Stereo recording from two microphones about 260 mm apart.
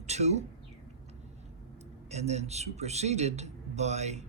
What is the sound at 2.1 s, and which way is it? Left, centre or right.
A man's voice, right.